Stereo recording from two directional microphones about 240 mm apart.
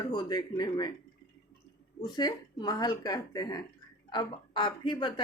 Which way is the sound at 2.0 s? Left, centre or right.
Centre.